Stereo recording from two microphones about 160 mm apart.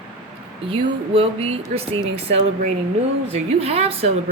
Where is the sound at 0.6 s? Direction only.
35° right (ahead or behind).